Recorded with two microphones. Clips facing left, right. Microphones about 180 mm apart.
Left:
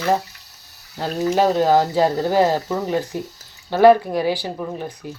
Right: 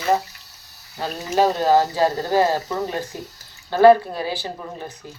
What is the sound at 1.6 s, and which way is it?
Speech, 15° left (ahead or behind).